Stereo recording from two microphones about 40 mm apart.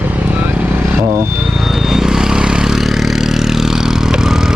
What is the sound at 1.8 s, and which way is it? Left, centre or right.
Vehicle, centre.